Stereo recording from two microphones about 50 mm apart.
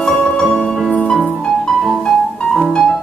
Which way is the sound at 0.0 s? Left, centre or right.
Centre.